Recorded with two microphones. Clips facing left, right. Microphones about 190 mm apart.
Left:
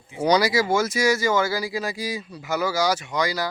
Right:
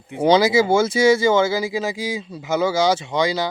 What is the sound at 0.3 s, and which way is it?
Speech, 25° right (ahead or behind).